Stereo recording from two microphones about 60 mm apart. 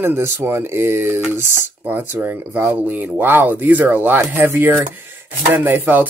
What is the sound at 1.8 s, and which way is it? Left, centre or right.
Speech, right.